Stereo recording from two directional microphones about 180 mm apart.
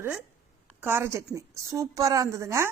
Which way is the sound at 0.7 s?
10° right (ahead or behind).